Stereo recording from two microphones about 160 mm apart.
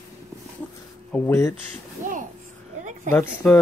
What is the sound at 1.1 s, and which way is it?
Speech, 15° left (ahead or behind).